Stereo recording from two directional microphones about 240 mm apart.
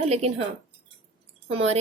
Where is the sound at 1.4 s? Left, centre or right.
Right.